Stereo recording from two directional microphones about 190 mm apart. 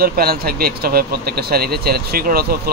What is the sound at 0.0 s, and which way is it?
A man's voice, 55° right (ahead or behind).